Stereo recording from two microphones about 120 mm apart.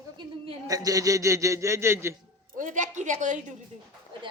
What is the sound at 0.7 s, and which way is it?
A man's voice, 30° right (ahead or behind).